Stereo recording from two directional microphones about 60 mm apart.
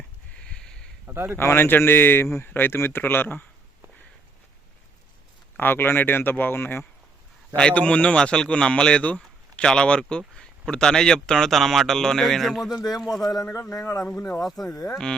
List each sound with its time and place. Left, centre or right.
0.4 s a sound: centre
1.0 s speech: right
1.4 s speech: left
5.5 s speech: left
7.5 s speech: left; by 12.7 s centre
12.7 s speech: left
13.0 s speech: centre
13.2 s speech: left
13.5 s speech: left
14.4 s speech: centre